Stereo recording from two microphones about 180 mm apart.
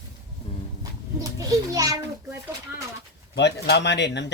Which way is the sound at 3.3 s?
70° left (ahead or behind).